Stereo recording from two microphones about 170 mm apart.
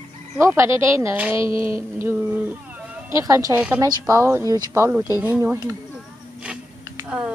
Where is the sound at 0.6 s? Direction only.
15° right (ahead or behind).